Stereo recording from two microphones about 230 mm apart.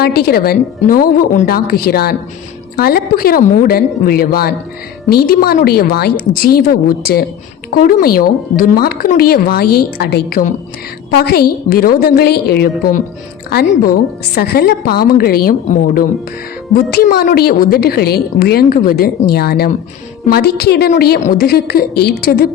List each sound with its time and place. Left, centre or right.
0.0 s a woman's voice: left